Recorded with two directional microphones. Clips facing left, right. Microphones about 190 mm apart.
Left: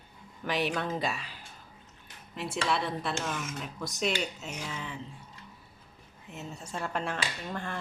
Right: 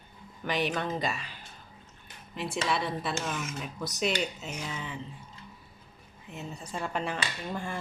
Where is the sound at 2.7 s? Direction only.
Centre (ahead or behind).